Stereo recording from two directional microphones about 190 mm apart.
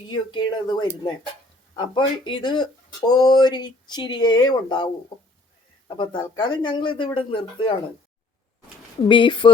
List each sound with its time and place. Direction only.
0.1 s speech: 25° left (ahead or behind)
6.0 s speech: 25° left (ahead or behind)
9.0 s speech: 25° left (ahead or behind)